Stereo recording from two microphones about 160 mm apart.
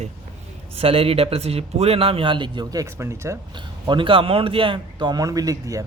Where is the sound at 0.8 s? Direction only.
35° right (ahead or behind); by 3.3 s 20° right (ahead or behind).